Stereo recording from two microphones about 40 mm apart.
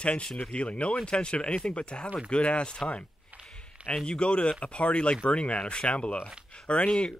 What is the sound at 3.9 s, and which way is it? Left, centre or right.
Speech, left.